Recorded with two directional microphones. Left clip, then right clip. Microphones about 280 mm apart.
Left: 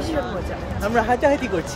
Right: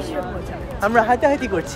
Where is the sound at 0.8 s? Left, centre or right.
Centre.